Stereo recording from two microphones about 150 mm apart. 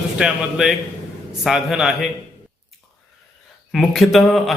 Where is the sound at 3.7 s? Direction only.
Centre (ahead or behind).